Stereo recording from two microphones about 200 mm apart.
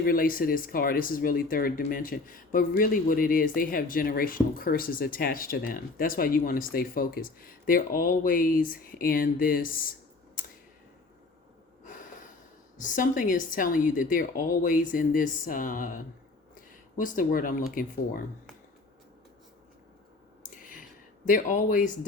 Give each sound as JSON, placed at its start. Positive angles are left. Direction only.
{"t": 0.0, "sound": "speech", "side_deg": 45}
{"t": 12.8, "sound": "speech", "side_deg": 40}
{"t": 17.0, "sound": "speech", "side_deg": 40}
{"t": 20.4, "sound": "a sound", "side_deg": 45}
{"t": 21.2, "sound": "speech", "side_deg": 40}